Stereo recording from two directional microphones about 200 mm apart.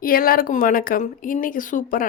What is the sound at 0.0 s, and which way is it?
A woman's voice, 45° left (ahead or behind).